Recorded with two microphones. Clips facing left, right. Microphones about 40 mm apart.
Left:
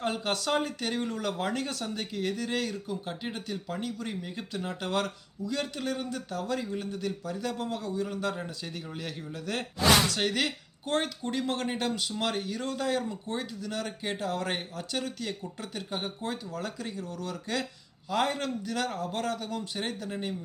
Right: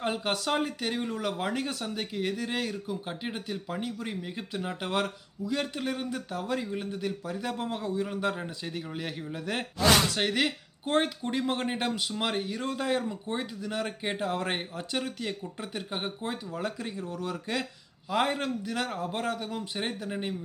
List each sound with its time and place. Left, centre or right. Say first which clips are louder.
0.0 s speech: even; centre